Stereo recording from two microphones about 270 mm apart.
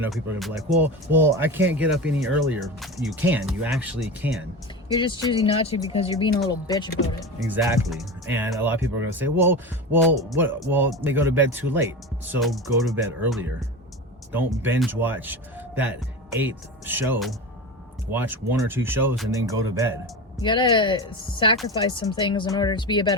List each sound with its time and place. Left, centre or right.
0.0 s speech: centre
4.9 s speech: centre
7.3 s speech: centre
20.4 s speech: centre